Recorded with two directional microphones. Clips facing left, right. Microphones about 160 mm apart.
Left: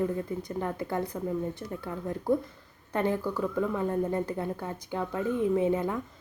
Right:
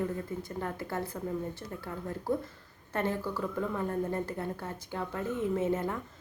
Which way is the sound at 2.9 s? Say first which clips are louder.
Left 4 dB; 15° left (ahead or behind).